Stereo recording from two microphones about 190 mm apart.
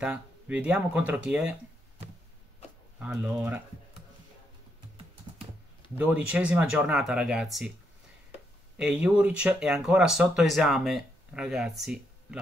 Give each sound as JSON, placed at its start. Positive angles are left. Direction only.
{"t": 0.0, "sound": "speech", "side_deg": -5}
{"t": 5.9, "sound": "speech", "side_deg": -5}
{"t": 8.7, "sound": "speech", "side_deg": -5}